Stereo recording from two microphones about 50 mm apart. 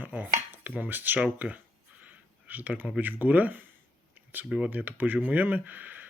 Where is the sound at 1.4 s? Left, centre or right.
Right.